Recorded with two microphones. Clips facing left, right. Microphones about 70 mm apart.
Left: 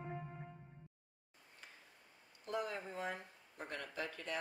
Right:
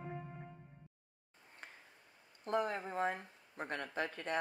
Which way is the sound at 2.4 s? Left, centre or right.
Right.